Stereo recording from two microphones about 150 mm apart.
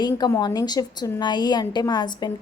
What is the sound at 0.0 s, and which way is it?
A woman's voice, 30° left (ahead or behind).